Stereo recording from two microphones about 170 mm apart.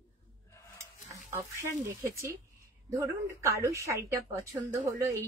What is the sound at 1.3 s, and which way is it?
Speech, 15° right (ahead or behind).